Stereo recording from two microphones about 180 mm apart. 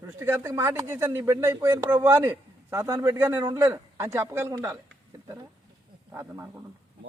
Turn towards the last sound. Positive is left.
turn(degrees=-15)  # may be behind; listen again after turning